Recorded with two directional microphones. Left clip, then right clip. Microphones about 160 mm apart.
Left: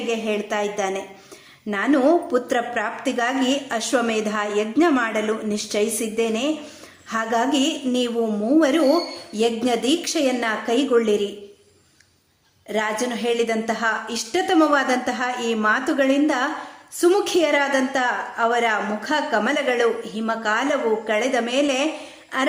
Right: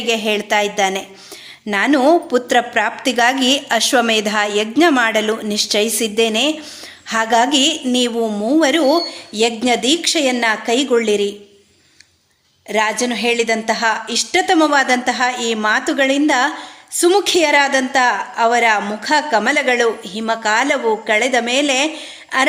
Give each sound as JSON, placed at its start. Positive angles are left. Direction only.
{"t": 0.1, "sound": "a woman's voice", "side_deg": -25}
{"t": 12.6, "sound": "a woman's voice", "side_deg": -20}